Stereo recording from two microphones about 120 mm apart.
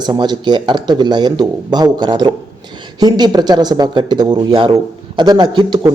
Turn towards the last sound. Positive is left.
turn(degrees=-40)  # may be behind; listen again after turning